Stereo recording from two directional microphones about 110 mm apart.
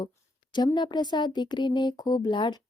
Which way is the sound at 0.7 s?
45° left (ahead or behind).